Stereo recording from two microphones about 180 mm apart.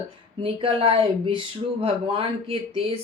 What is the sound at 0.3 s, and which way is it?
Speech, 30° right (ahead or behind).